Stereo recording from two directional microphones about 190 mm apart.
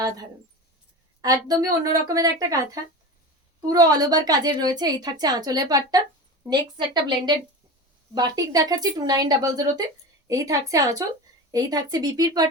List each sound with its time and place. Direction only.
1.2 s speech: 20° right (ahead or behind)
3.7 s a woman's voice: 20° right (ahead or behind)